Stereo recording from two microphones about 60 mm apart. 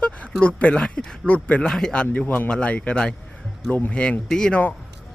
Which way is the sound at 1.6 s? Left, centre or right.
Centre.